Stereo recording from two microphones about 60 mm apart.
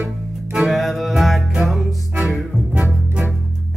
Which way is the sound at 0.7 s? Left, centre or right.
Centre.